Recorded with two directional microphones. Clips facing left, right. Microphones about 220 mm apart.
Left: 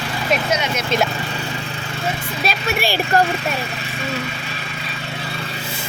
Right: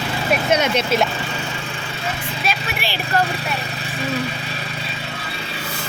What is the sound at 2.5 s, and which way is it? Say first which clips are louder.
Vehicle: left 5 dB; 45° left (ahead or behind).